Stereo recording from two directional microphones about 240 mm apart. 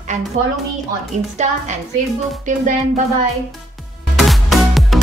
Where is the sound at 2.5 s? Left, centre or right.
Right.